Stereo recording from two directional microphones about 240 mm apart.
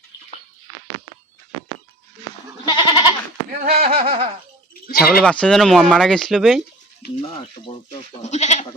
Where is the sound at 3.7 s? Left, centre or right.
Right.